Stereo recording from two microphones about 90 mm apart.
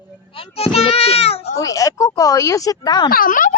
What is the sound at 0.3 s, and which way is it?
A child's voice, 90° left.